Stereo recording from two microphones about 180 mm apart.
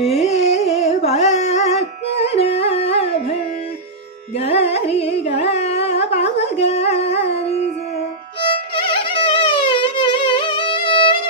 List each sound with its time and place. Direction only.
0.0 s carnatic music: centre (ahead or behind)
0.3 s music: 35° left (ahead or behind)
4.4 s carnatic music: 35° left (ahead or behind)
5.8 s a sound: 35° left (ahead or behind)
6.4 s music: 35° left (ahead or behind)